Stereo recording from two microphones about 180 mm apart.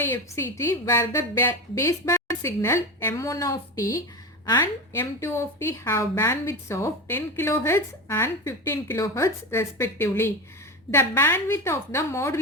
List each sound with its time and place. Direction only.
0.0 s a woman's voice: 10° left (ahead or behind)